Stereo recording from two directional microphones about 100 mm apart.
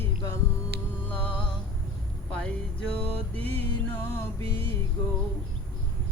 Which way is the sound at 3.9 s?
20° left (ahead or behind).